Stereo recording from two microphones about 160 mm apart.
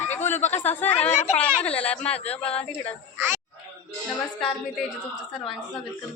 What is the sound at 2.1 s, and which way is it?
Speech, 40° left (ahead or behind).